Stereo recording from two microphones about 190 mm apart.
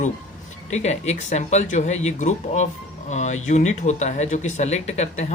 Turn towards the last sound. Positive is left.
turn(degrees=35)  # may be behind; listen again after turning